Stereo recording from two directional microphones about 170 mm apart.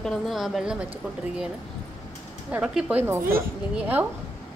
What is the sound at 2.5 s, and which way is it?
A woman's voice, 5° right (ahead or behind).